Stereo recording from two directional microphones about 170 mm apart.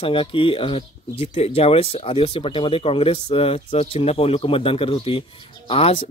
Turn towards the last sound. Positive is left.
turn(degrees=35)  # may be behind; listen again after turning